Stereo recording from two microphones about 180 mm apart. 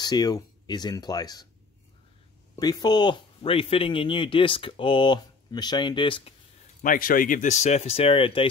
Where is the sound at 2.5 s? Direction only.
20° left (ahead or behind).